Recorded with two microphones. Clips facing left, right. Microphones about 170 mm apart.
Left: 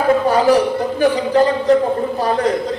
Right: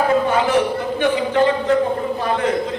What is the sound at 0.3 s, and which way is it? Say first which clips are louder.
A man's voice: left 4 dB; 35° left (ahead or behind).